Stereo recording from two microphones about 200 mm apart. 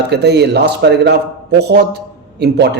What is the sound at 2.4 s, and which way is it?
Speech, 55° right (ahead or behind).